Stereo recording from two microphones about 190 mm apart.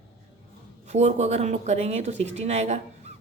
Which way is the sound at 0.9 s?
35° right (ahead or behind).